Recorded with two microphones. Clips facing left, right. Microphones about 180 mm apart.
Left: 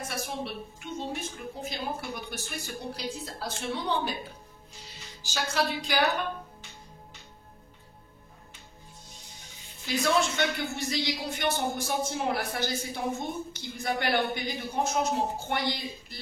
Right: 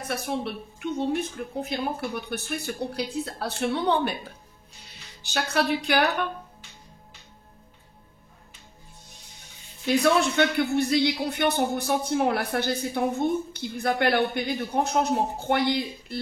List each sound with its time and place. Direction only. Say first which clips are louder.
0.1 s a man's voice: right 9 dB; 60° right (ahead or behind)
5.2 s a man's voice: right 4 dB; 65° right (ahead or behind)
9.8 s a man's voice: right 5 dB; 60° right (ahead or behind)